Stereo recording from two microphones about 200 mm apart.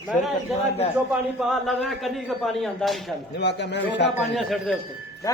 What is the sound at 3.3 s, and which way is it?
Speech, 60° left (ahead or behind).